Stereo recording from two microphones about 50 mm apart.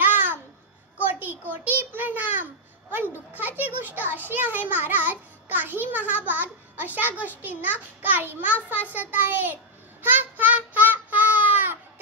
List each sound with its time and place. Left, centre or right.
0.0 s babbling: right
0.9 s a sound: right
2.0 s a child's voice: right
10.0 s child singing: right